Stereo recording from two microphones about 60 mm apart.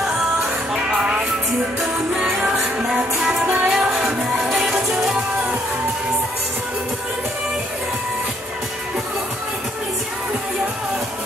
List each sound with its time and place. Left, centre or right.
0.8 s music: centre
2.4 s music: centre